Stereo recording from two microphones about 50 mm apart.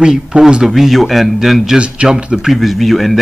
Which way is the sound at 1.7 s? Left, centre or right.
Right.